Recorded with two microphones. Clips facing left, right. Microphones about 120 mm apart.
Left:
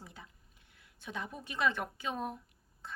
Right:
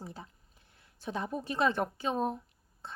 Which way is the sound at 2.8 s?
30° right (ahead or behind).